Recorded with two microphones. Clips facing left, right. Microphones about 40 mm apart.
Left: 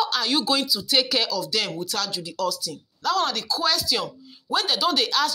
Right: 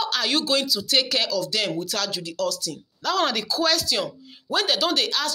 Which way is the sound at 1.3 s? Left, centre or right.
Right.